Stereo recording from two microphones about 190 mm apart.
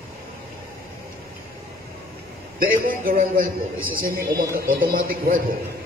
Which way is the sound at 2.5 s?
45° right (ahead or behind).